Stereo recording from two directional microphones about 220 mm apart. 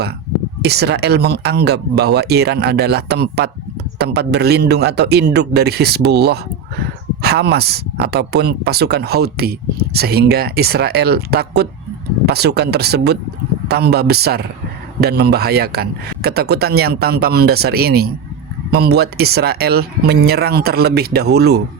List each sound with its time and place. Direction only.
0.6 s speech: 50° right (ahead or behind)